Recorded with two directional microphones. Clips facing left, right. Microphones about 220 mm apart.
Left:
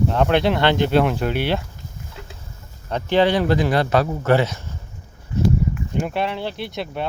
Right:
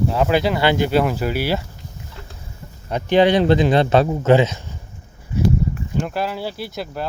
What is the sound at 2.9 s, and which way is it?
Speech, 15° right (ahead or behind).